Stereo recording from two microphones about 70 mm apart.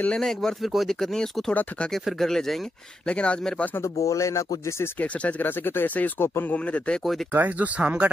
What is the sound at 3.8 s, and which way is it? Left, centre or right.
Speech, left.